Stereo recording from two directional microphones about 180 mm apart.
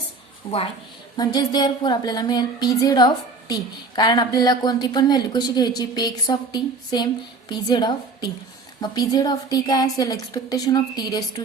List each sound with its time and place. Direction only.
0.4 s speech: 20° left (ahead or behind)